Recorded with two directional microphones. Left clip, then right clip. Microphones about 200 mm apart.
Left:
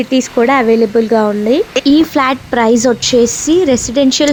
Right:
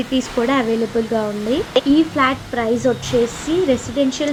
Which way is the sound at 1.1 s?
35° left (ahead or behind).